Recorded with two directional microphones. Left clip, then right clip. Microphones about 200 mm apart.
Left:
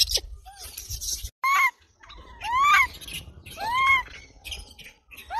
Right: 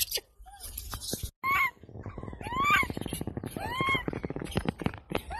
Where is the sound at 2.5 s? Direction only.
20° left (ahead or behind).